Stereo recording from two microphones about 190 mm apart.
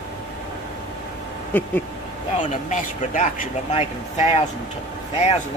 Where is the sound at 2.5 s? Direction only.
40° left (ahead or behind).